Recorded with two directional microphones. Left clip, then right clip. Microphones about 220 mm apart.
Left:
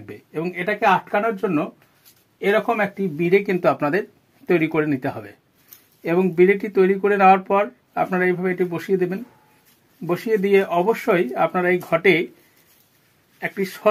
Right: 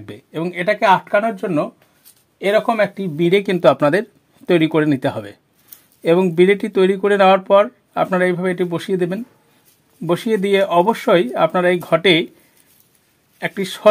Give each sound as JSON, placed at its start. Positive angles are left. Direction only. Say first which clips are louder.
{"t": 0.0, "sound": "speech", "louder": "right 2 dB", "side_deg": -45}
{"t": 13.4, "sound": "speech", "louder": "right 3 dB", "side_deg": -45}